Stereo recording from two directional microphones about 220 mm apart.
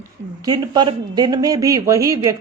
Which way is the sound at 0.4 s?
15° right (ahead or behind).